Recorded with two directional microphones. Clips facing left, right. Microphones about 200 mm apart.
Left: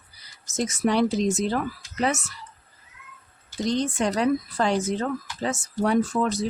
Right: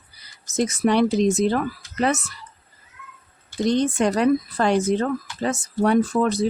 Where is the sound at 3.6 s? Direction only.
60° right (ahead or behind).